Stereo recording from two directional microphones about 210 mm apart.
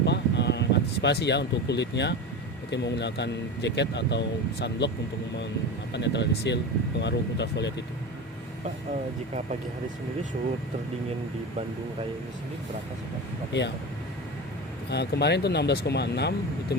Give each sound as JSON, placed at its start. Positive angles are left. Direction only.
{"t": 0.0, "sound": "a sound", "side_deg": 55}
{"t": 2.6, "sound": "speech", "side_deg": 55}
{"t": 5.9, "sound": "speech", "side_deg": 55}
{"t": 13.5, "sound": "speech", "side_deg": 55}
{"t": 14.8, "sound": "speech", "side_deg": 55}